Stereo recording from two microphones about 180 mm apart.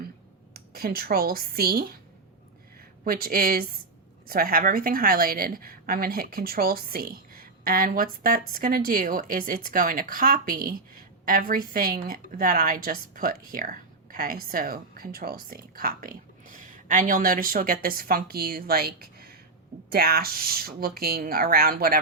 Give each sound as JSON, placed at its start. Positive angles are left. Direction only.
{"t": 0.5, "sound": "speech", "side_deg": -55}
{"t": 3.0, "sound": "a woman's voice", "side_deg": -55}